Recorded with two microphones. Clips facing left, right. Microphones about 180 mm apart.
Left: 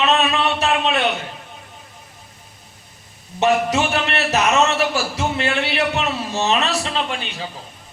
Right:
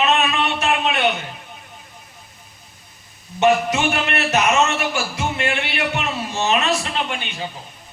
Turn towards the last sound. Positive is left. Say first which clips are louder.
# left 1 dB
turn(degrees=35)  # may be behind; listen again after turning